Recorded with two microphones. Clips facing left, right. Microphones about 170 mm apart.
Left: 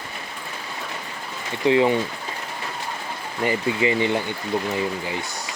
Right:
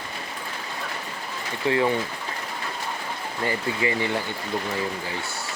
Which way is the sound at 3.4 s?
20° left (ahead or behind).